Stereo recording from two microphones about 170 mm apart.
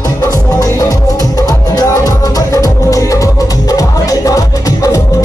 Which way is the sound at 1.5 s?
20° left (ahead or behind).